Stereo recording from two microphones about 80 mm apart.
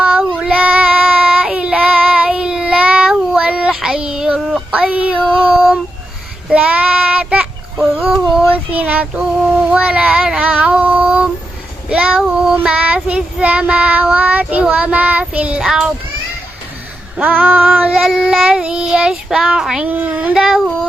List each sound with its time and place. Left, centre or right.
0.0 s child singing: centre
4.4 s child singing: centre
4.7 s child singing: centre
8.5 s child singing: centre
17.2 s child singing: right
19.8 s child singing: centre